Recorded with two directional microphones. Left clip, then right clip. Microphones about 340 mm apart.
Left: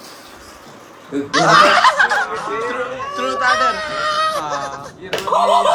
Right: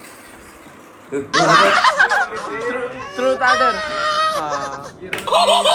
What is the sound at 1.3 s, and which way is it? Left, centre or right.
Speech, centre.